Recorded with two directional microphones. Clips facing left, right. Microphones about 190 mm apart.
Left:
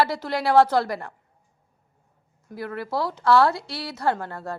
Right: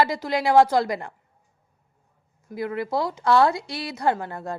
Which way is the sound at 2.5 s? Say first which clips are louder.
Right 3 dB; 15° right (ahead or behind).